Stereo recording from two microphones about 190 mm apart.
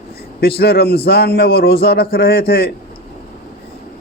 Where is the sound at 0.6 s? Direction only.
55° left (ahead or behind).